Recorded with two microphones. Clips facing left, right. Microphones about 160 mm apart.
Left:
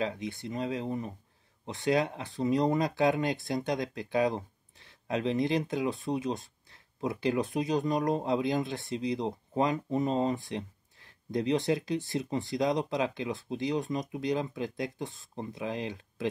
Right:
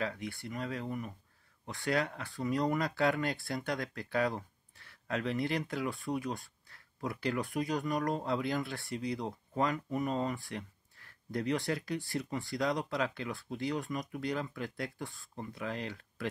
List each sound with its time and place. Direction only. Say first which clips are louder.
0.0 s speech: left 4 dB; 20° left (ahead or behind)